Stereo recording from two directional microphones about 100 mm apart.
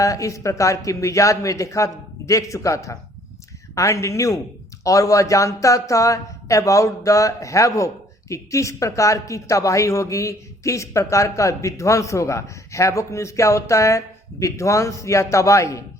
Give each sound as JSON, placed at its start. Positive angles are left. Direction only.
{"t": 0.0, "sound": "speech", "side_deg": 35}